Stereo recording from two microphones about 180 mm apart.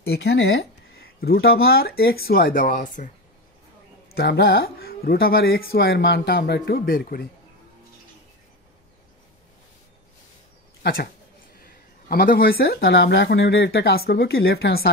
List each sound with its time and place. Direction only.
0.0 s speech: 65° left (ahead or behind)
4.1 s speech: 60° left (ahead or behind)
10.8 s speech: 60° left (ahead or behind)